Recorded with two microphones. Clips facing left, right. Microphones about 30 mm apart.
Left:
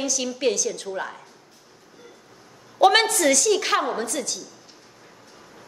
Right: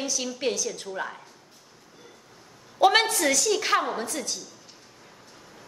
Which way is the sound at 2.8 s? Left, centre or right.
Left.